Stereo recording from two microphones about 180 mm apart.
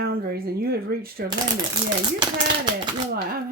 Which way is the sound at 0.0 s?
60° right (ahead or behind).